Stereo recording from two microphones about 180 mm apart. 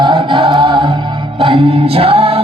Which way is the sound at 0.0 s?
25° right (ahead or behind).